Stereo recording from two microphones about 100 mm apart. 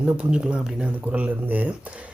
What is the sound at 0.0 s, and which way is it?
Speech, 10° right (ahead or behind).